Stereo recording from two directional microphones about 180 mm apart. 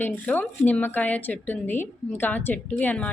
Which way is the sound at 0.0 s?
10° left (ahead or behind).